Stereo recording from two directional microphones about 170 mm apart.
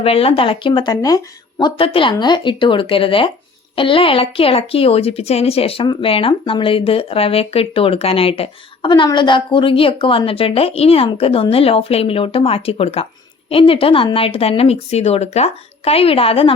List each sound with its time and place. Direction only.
0.0 s speech: 35° left (ahead or behind)